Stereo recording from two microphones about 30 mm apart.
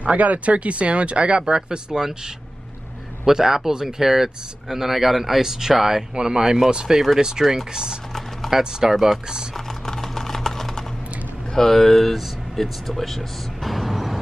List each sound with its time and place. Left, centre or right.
0.0 s speech: right
1.5 s speech: right
2.0 s speech: centre
9.7 s a sound: centre
11.5 s speech: centre